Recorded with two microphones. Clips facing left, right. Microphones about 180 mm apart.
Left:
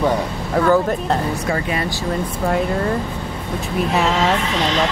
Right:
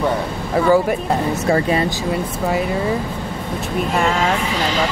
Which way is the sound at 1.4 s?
30° right (ahead or behind).